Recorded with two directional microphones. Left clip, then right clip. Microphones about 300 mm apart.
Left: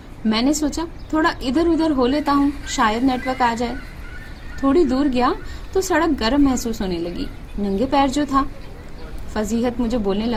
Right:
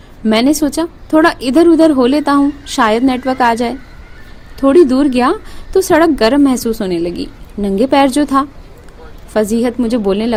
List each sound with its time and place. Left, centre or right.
0.3 s a woman's voice: right